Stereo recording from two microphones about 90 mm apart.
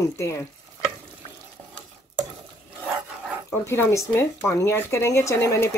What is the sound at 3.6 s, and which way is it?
Speech, 30° left (ahead or behind).